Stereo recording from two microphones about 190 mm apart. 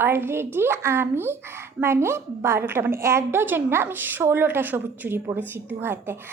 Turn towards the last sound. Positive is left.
turn(degrees=-10)  # may be behind; listen again after turning